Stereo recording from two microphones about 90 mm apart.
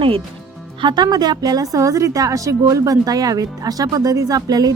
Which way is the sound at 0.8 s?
50° right (ahead or behind).